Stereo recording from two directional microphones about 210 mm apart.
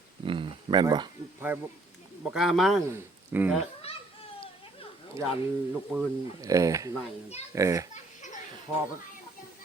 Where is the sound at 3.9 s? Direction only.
25° left (ahead or behind).